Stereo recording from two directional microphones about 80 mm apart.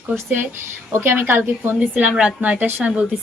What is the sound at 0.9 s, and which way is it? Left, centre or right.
A woman's voice, right.